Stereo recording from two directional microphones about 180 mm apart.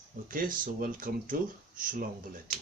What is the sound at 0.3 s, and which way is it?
Speech, 50° right (ahead or behind).